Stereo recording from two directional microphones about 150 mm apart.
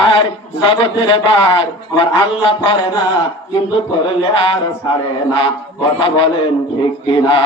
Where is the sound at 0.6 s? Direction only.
35° left (ahead or behind).